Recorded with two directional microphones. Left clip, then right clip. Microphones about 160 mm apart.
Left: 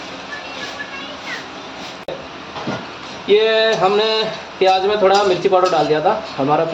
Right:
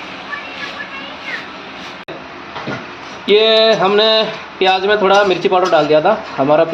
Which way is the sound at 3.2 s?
55° right (ahead or behind).